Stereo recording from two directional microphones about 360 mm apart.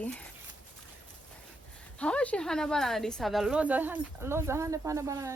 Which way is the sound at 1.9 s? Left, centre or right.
Centre.